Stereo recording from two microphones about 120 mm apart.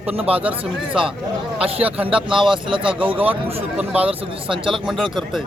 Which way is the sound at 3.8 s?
10° right (ahead or behind).